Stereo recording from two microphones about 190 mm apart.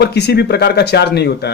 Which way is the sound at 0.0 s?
60° left (ahead or behind).